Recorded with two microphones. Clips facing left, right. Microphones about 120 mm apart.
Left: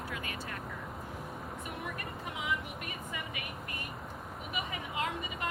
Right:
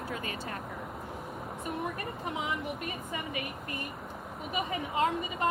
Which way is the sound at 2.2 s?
30° right (ahead or behind).